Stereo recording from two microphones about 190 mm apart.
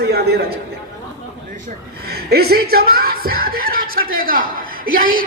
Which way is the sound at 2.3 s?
55° right (ahead or behind).